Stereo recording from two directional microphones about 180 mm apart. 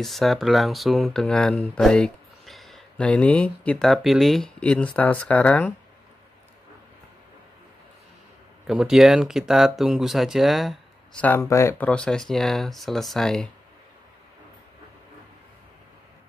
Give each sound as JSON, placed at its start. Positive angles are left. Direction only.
{"t": 0.0, "sound": "speech", "side_deg": 0}
{"t": 8.6, "sound": "speech", "side_deg": -5}